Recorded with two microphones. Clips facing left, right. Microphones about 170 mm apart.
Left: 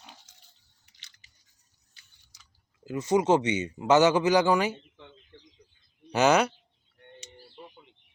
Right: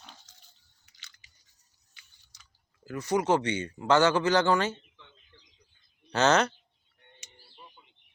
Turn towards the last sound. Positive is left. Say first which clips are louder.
# left 2 dB
turn(degrees=10)  # may be behind; listen again after turning